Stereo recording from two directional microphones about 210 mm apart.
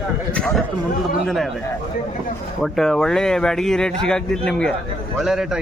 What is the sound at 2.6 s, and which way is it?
Speech, centre (ahead or behind).